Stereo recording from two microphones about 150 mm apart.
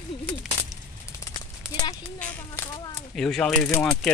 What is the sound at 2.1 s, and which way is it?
Speech, 10° left (ahead or behind).